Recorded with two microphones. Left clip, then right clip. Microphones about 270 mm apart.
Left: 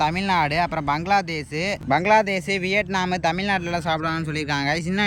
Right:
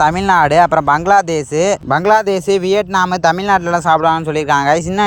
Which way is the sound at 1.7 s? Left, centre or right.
Right.